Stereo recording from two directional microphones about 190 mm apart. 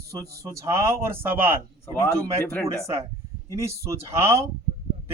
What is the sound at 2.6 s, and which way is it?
Speech, 15° right (ahead or behind).